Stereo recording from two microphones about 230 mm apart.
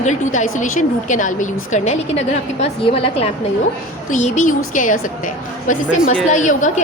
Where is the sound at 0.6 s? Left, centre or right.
Left.